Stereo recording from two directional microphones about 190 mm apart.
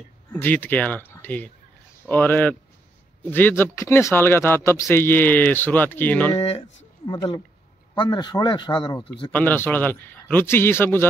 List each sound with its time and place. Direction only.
0.3 s speech: 10° left (ahead or behind)
6.3 s a sound: 30° left (ahead or behind)
7.1 s speech: 20° left (ahead or behind)
9.3 s speech: 10° left (ahead or behind)